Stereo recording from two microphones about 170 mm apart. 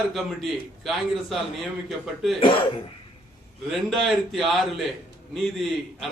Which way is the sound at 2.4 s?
30° left (ahead or behind).